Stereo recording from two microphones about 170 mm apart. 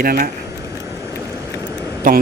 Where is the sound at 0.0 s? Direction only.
60° right (ahead or behind).